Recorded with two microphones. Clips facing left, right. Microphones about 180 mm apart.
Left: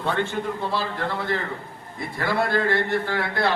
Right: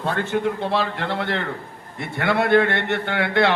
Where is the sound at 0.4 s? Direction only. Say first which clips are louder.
Right 4 dB; 70° right (ahead or behind).